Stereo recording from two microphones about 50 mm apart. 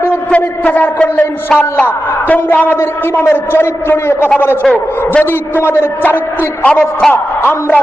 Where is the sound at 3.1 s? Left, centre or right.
Left.